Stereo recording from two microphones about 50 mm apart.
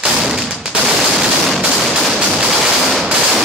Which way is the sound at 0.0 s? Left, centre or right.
Centre.